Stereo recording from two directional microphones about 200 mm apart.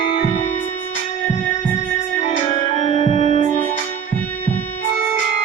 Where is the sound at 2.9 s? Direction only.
30° left (ahead or behind).